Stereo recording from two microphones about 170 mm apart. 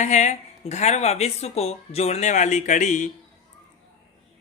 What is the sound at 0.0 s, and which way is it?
Speech, 45° left (ahead or behind).